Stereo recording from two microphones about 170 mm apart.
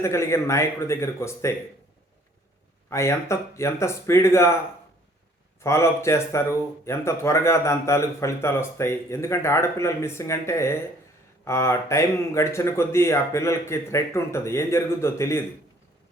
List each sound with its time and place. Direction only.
0.0 s speech: 15° left (ahead or behind)
2.9 s speech: 15° left (ahead or behind)
5.5 s speech: 15° left (ahead or behind)